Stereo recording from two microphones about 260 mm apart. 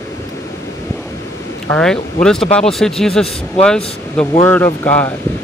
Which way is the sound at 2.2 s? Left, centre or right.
Centre.